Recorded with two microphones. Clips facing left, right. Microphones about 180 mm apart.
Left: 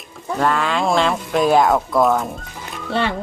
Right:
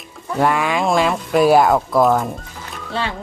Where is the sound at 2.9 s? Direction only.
65° left (ahead or behind).